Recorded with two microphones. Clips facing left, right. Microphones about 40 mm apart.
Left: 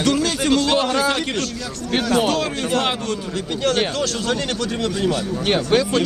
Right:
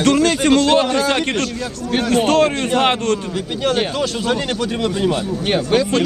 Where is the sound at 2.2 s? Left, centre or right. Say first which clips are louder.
Right 6 dB; right.